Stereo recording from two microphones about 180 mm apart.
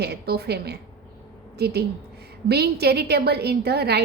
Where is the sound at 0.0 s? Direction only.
65° right (ahead or behind).